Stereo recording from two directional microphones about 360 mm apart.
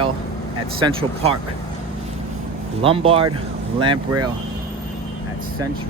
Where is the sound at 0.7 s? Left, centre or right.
Centre.